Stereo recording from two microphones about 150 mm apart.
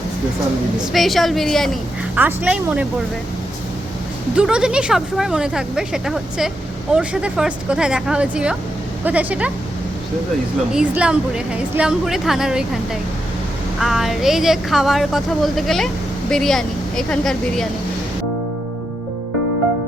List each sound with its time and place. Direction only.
0.9 s speech: centre (ahead or behind)
2.1 s speech: 10° right (ahead or behind)
4.4 s speech: 5° right (ahead or behind)
10.7 s speech: 5° right (ahead or behind)